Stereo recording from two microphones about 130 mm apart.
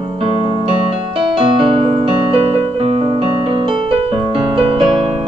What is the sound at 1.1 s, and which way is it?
Music, 40° right (ahead or behind).